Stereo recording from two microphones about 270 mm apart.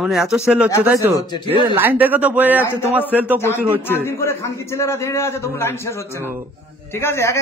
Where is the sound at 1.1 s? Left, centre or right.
Centre.